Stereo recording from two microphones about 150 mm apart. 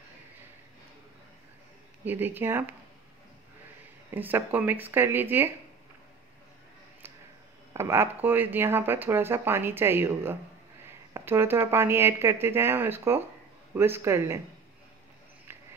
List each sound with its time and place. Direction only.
2.0 s speech: 15° right (ahead or behind)
4.1 s speech: 15° right (ahead or behind)
7.7 s speech: 15° right (ahead or behind)